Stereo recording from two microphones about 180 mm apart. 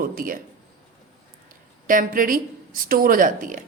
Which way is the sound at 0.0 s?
50° right (ahead or behind).